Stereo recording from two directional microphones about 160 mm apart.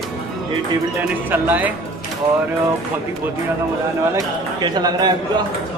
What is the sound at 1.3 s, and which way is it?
Speech, 10° right (ahead or behind).